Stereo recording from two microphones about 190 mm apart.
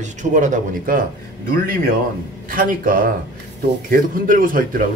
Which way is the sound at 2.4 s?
45° right (ahead or behind).